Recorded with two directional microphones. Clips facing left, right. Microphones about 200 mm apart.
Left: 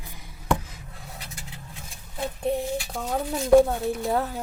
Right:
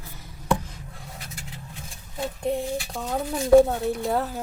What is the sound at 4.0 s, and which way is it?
Speech, centre (ahead or behind).